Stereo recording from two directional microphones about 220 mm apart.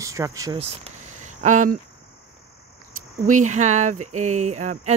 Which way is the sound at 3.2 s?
35° right (ahead or behind).